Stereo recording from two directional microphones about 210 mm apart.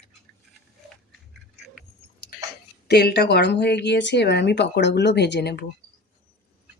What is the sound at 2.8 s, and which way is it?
Speech, 50° left (ahead or behind).